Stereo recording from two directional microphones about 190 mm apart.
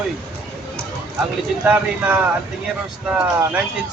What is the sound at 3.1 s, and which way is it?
Speech, 5° right (ahead or behind).